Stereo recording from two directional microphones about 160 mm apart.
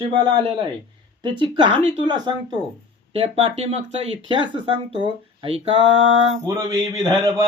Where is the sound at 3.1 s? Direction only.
35° right (ahead or behind).